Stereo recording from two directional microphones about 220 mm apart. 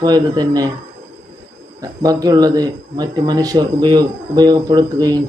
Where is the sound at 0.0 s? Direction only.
20° right (ahead or behind).